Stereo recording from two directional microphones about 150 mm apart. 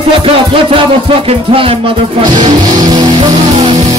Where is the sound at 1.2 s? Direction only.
40° right (ahead or behind).